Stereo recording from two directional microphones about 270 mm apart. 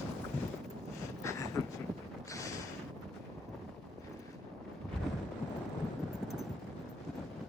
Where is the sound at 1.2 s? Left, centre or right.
Centre.